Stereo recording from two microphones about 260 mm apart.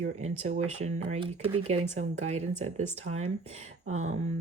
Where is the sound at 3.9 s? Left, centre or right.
Right.